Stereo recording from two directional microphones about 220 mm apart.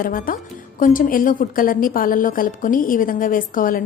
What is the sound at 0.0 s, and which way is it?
A woman's voice, 40° left (ahead or behind).